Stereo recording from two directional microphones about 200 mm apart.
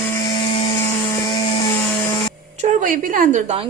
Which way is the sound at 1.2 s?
20° left (ahead or behind).